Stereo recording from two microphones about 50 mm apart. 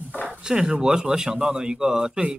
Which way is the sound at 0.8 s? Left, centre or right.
Centre.